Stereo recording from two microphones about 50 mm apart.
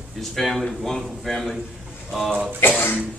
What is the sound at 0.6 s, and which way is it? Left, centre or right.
Speech, centre.